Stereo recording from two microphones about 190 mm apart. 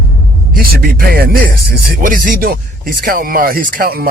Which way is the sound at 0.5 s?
50° right (ahead or behind).